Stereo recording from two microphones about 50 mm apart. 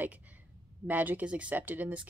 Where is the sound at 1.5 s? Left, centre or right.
Right.